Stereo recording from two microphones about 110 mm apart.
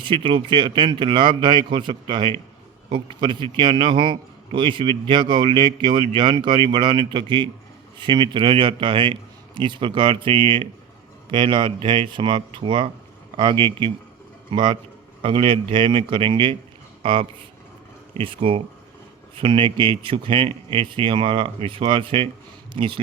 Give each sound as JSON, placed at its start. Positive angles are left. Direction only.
{"t": 0.0, "sound": "a man's voice", "side_deg": -50}
{"t": 15.2, "sound": "a man's voice", "side_deg": -55}